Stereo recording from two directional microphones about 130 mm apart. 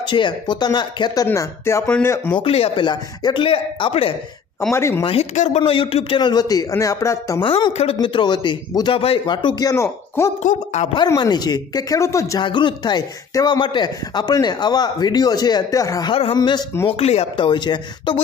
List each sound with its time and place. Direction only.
0.0 s speech: 35° left (ahead or behind)
1.2 s speech: 20° left (ahead or behind)
2.3 s speech: 45° left (ahead or behind)
4.7 s speech: 20° left (ahead or behind)
5.0 s speech: 55° left (ahead or behind)
5.6 s speech: 45° left (ahead or behind); by 7.4 s 25° left (ahead or behind)
7.4 s speech: 45° left (ahead or behind); by 10.3 s 20° left (ahead or behind)
10.4 s speech: 65° left (ahead or behind)
11.0 s speech: 35° left (ahead or behind)
12.4 s speech: 40° left (ahead or behind)
16.1 s speech: 45° left (ahead or behind)
16.3 s speech: 30° left (ahead or behind)
16.8 s speech: 50° left (ahead or behind); by 18.2 s 35° left (ahead or behind)